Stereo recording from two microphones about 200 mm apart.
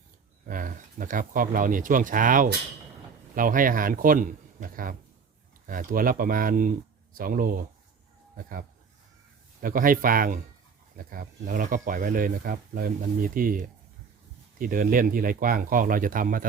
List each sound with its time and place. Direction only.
0.4 s speech: 40° right (ahead or behind)